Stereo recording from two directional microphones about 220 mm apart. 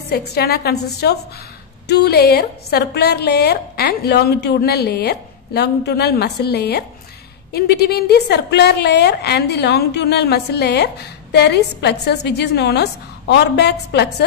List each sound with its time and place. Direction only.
0.1 s a woman's voice: 45° left (ahead or behind)